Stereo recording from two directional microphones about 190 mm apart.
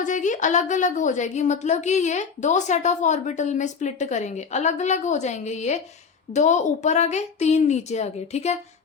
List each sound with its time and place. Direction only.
0.0 s a woman's voice: 40° left (ahead or behind)